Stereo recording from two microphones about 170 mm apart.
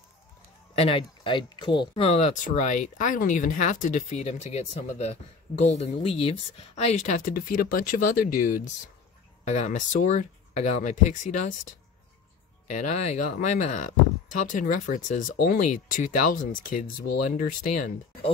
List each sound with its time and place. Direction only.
0.7 s speech: 35° left (ahead or behind)
12.6 s speech: 45° left (ahead or behind)